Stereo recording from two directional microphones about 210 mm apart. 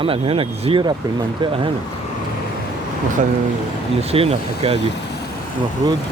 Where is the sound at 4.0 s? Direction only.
30° right (ahead or behind).